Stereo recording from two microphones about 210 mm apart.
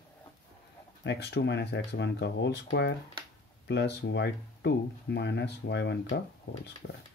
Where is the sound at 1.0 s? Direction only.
55° left (ahead or behind).